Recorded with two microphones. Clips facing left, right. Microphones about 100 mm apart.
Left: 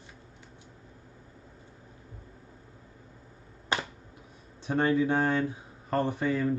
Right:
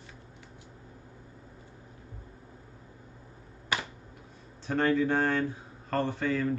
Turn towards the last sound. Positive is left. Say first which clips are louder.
# left 1 dB
turn(degrees=15)  # may be behind; listen again after turning